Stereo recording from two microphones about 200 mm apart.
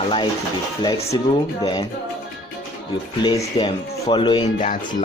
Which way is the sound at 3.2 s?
20° left (ahead or behind).